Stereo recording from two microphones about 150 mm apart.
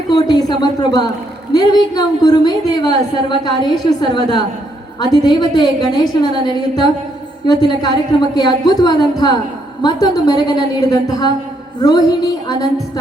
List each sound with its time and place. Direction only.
0.1 s a woman's voice: 25° left (ahead or behind)